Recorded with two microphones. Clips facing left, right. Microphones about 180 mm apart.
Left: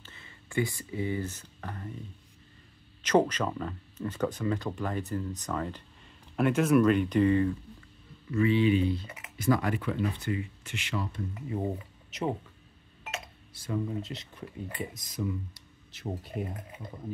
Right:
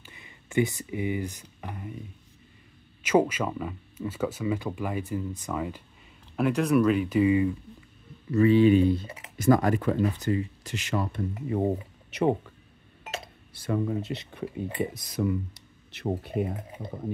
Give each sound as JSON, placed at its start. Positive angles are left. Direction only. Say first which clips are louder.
{"t": 0.0, "sound": "speech", "louder": "right 1 dB", "side_deg": -15}
{"t": 3.0, "sound": "speech", "louder": "right 2 dB", "side_deg": -10}
{"t": 8.3, "sound": "speech", "louder": "right 6 dB", "side_deg": -40}
{"t": 9.0, "sound": "a sound", "louder": "right 4 dB", "side_deg": -35}
{"t": 9.5, "sound": "speech", "louder": "right 6 dB", "side_deg": -40}
{"t": 13.5, "sound": "speech", "louder": "right 5 dB", "side_deg": -65}